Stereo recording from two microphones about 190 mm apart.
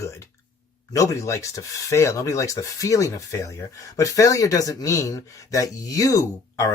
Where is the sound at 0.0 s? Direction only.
15° left (ahead or behind).